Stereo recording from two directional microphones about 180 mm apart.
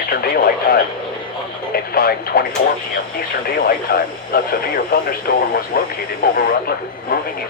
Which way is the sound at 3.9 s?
60° left (ahead or behind).